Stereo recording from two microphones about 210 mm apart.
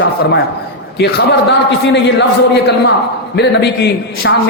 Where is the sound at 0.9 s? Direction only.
55° left (ahead or behind).